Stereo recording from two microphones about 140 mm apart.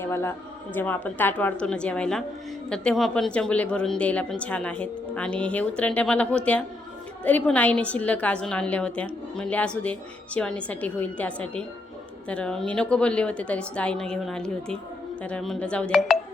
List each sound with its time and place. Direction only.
0.0 s a woman's voice: 20° left (ahead or behind)